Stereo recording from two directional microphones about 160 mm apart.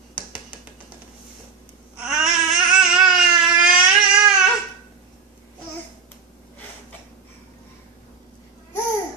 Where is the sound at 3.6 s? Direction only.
5° right (ahead or behind).